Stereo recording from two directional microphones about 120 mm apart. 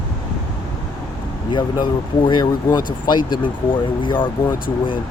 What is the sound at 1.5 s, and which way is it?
Speech, 40° left (ahead or behind).